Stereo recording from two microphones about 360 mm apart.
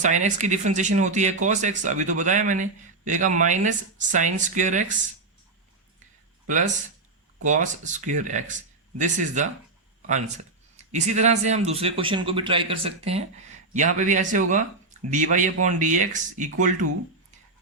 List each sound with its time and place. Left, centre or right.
0.0 s speech: centre
7.4 s speech: right